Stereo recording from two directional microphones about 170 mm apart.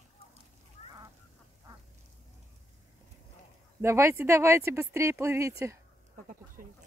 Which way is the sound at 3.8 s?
15° right (ahead or behind).